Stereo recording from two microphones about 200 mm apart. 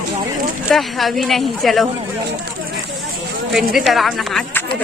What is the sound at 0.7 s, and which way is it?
Speech, centre (ahead or behind).